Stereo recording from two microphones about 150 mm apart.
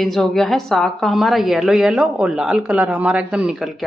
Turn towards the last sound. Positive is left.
turn(degrees=0)  # may be behind; listen again after turning